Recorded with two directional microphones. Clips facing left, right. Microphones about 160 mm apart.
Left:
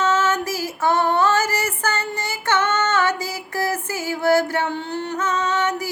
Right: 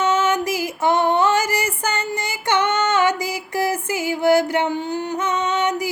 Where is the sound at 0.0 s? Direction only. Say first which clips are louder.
Right 1 dB; 15° right (ahead or behind).